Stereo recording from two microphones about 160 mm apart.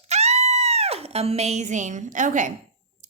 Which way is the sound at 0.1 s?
45° right (ahead or behind).